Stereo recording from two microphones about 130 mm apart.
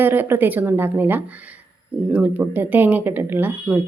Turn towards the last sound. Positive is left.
turn(degrees=-10)  # may be behind; listen again after turning